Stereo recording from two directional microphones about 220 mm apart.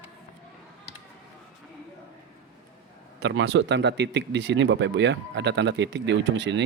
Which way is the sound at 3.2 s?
55° right (ahead or behind).